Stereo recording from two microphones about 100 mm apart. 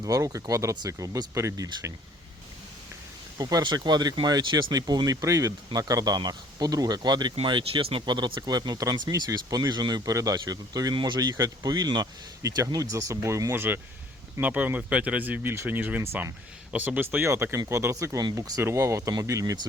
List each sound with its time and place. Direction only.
0.0 s speech: 35° right (ahead or behind)
3.3 s speech: 40° right (ahead or behind)
7.4 s speech: 60° right (ahead or behind)
8.0 s speech: 45° right (ahead or behind)